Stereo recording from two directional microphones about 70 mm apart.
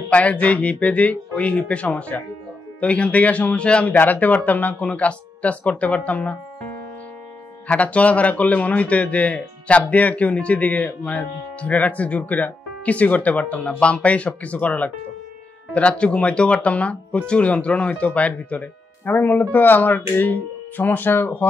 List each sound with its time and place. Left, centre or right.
0.1 s speech: left
7.6 s speech: centre